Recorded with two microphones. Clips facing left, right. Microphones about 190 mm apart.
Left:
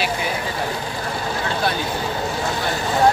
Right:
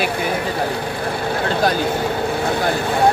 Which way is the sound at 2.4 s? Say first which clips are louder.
Right 5 dB; 55° right (ahead or behind).